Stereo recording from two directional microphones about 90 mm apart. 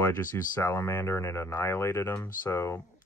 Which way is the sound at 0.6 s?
30° left (ahead or behind).